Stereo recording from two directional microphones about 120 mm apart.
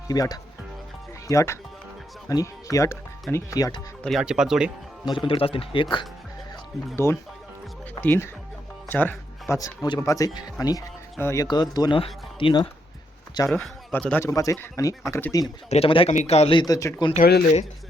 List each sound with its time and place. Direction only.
0.1 s speech: 30° left (ahead or behind)
4.2 s speech: 5° right (ahead or behind)
5.0 s speech: 45° left (ahead or behind)
6.9 s speech: 20° left (ahead or behind)
9.6 s speech: 30° left (ahead or behind)
11.2 s speech: 20° left (ahead or behind)
11.4 s speech: 35° left (ahead or behind)
11.9 s speech: 45° left (ahead or behind)
13.5 s speech: 10° left (ahead or behind)
14.3 s speech: 25° left (ahead or behind)
15.7 s speech: 50° left (ahead or behind)
16.1 s speech: 65° left (ahead or behind)
16.6 s speech: 30° left (ahead or behind)
17.2 s speech: 70° left (ahead or behind)